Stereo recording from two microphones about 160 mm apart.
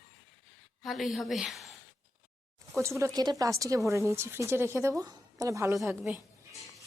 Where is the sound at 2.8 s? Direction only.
20° right (ahead or behind).